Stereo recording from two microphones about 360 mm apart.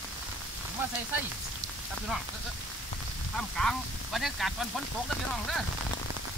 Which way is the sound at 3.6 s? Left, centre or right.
Centre.